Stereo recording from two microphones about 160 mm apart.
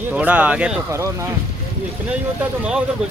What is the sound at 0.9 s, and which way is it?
Speech, 20° right (ahead or behind).